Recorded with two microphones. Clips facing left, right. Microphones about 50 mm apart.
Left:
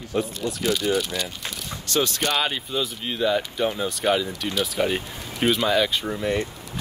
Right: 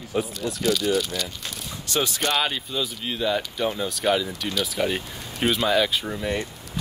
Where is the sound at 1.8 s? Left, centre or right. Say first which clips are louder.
Left 2 dB; centre.